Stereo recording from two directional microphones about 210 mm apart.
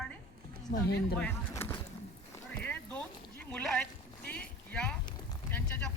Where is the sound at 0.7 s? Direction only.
50° left (ahead or behind).